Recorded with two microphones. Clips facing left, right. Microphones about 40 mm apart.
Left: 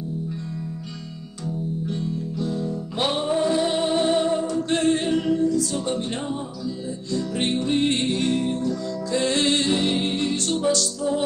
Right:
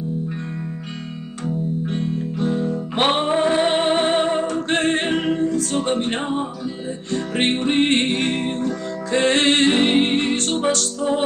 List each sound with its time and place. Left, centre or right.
1.9 s music: right